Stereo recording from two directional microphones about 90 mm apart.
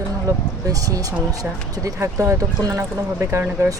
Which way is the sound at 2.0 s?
30° right (ahead or behind).